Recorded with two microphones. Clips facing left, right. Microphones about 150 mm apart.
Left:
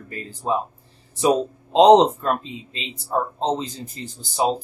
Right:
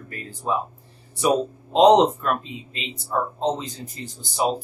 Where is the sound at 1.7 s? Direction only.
30° left (ahead or behind).